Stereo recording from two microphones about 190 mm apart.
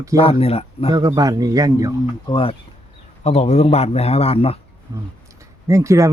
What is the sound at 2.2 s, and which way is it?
Speech, 25° left (ahead or behind).